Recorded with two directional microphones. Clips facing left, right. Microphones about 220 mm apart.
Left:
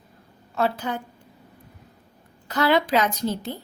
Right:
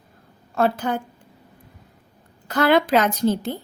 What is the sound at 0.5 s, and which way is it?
Speech, 50° right (ahead or behind).